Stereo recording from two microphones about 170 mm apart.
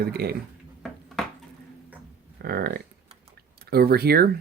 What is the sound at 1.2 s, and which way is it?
Dishes, 5° left (ahead or behind).